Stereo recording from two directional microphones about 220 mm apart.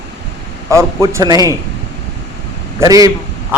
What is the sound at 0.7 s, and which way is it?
Speech, 15° right (ahead or behind).